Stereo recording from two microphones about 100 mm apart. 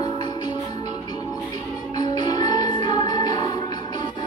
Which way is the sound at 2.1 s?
40° left (ahead or behind).